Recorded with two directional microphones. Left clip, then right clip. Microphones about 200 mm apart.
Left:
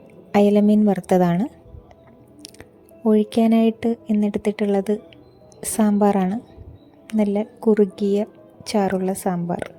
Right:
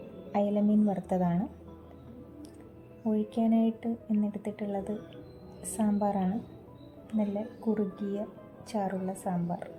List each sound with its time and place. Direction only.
0.3 s speech: 50° left (ahead or behind)
3.1 s speech: 50° left (ahead or behind)